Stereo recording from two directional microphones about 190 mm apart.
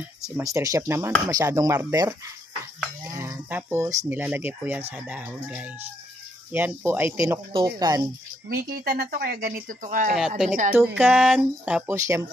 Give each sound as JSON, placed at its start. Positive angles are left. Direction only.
{"t": 0.4, "sound": "speech", "side_deg": -15}
{"t": 6.5, "sound": "speech", "side_deg": -10}
{"t": 8.5, "sound": "speech", "side_deg": -50}
{"t": 10.1, "sound": "speech", "side_deg": -5}
{"t": 11.9, "sound": "speech", "side_deg": -15}